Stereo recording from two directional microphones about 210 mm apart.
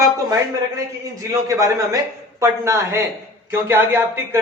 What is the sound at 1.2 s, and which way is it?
A man's voice, 15° right (ahead or behind).